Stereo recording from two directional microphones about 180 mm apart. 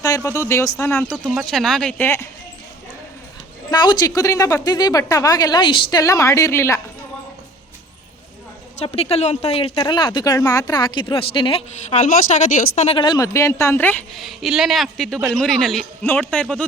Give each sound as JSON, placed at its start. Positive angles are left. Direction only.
{"t": 0.2, "sound": "a woman's voice", "side_deg": 15}
{"t": 1.1, "sound": "speech", "side_deg": 0}
{"t": 3.7, "sound": "speech", "side_deg": 25}
{"t": 8.8, "sound": "speech", "side_deg": 35}
{"t": 12.5, "sound": "a woman's voice", "side_deg": 45}
{"t": 14.2, "sound": "speech", "side_deg": 0}